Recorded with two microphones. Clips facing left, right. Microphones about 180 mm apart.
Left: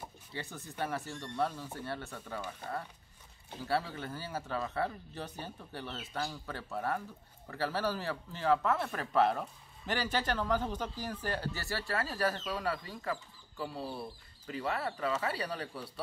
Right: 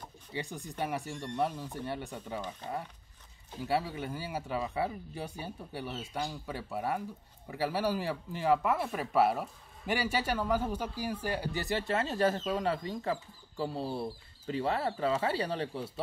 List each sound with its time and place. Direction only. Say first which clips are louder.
0.3 s speech: right 5 dB; 15° right (ahead or behind)